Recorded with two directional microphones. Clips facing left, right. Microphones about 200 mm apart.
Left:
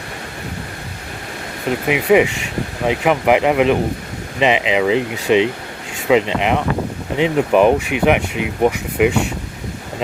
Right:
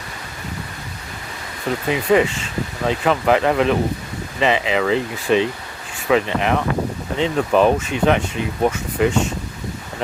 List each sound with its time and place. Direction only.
1.6 s speech: 15° left (ahead or behind)